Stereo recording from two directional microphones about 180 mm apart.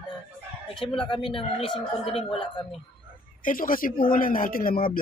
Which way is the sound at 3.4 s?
50° left (ahead or behind).